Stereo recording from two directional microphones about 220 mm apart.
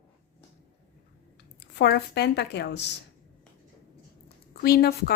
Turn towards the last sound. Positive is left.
turn(degrees=45)  # may be behind; listen again after turning